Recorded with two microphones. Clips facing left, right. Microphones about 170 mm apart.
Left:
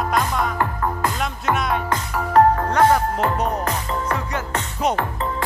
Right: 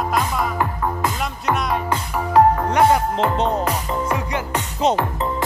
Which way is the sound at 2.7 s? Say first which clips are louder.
Right 1 dB; 15° right (ahead or behind).